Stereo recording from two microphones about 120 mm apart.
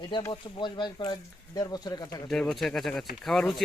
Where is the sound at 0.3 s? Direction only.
40° left (ahead or behind).